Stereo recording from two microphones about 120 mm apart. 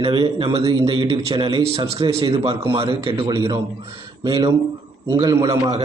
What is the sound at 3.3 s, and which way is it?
A man's voice, 35° right (ahead or behind).